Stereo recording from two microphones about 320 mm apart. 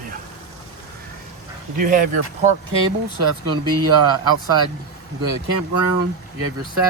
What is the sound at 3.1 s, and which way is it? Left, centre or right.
Speech, right.